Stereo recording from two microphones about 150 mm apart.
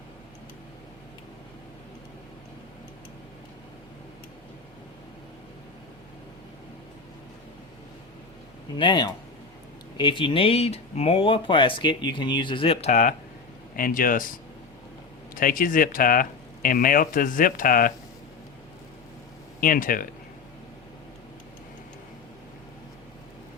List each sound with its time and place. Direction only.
8.8 s speech: 30° left (ahead or behind); by 13.1 s 55° left (ahead or behind)
13.7 s speech: 70° left (ahead or behind)
15.4 s speech: 65° left (ahead or behind)
19.5 s speech: 65° left (ahead or behind)